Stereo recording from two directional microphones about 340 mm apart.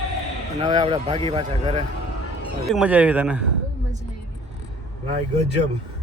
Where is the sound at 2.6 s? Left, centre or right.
Centre.